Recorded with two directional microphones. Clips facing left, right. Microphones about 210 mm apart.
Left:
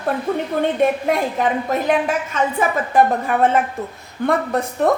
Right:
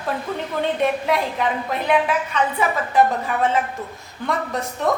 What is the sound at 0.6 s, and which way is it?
A woman's voice, 50° left (ahead or behind).